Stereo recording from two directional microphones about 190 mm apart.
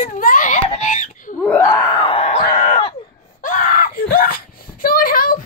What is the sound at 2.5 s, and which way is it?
Screaming, 40° left (ahead or behind).